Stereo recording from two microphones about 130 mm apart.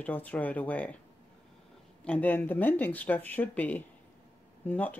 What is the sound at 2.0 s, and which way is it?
Speech, 10° left (ahead or behind).